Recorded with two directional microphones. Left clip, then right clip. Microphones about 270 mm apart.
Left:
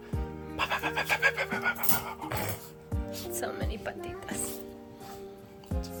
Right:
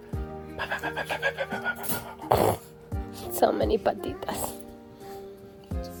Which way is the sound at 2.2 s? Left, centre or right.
Centre.